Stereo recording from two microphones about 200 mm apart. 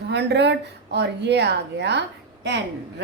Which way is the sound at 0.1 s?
60° right (ahead or behind).